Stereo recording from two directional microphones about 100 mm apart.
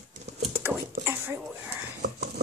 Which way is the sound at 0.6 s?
25° right (ahead or behind).